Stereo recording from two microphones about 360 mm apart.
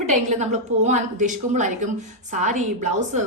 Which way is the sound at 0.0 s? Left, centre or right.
Centre.